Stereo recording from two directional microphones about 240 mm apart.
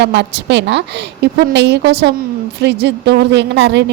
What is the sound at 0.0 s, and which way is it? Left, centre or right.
A woman's voice, right.